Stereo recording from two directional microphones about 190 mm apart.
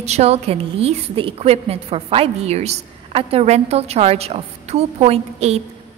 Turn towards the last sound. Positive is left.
turn(degrees=-35)  # may be behind; listen again after turning